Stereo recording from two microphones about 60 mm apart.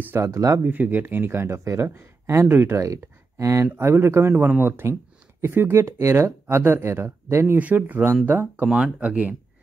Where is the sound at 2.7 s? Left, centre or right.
Right.